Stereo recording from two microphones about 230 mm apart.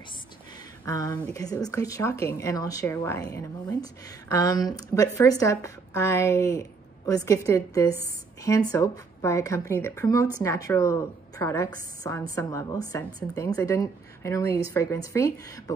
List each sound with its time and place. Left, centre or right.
0.8 s speech: centre